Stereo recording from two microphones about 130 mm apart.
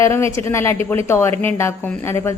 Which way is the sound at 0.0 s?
20° left (ahead or behind).